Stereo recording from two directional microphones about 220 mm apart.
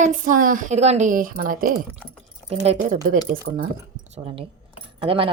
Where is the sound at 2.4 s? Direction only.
30° right (ahead or behind).